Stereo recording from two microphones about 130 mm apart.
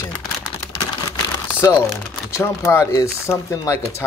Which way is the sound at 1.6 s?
25° left (ahead or behind).